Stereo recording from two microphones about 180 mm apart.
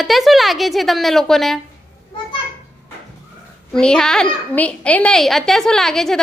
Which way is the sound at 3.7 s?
5° left (ahead or behind).